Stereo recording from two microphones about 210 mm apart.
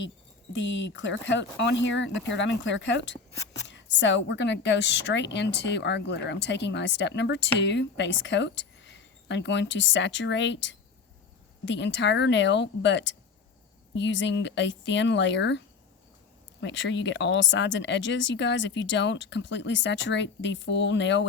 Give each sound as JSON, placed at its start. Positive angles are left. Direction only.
{"t": 0.5, "sound": "a woman's voice", "side_deg": 60}